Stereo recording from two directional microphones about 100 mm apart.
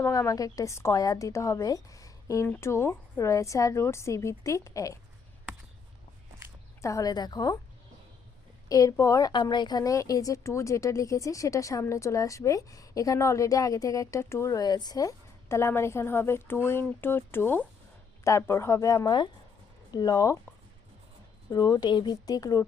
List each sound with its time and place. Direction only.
0.0 s speech: 35° left (ahead or behind)
6.8 s speech: 35° left (ahead or behind)
8.7 s speech: 35° left (ahead or behind)
9.3 s speech: 50° left (ahead or behind); by 14.6 s 25° left (ahead or behind)
14.6 s a woman's voice: 45° left (ahead or behind)
21.5 s speech: 40° left (ahead or behind)